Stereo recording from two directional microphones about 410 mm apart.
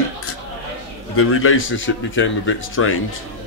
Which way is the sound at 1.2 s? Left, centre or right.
Left.